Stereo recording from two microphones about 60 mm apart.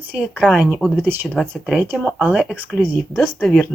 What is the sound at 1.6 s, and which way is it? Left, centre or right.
Speech, centre.